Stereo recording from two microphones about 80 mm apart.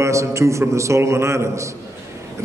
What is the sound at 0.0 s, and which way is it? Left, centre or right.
A man's voice, right.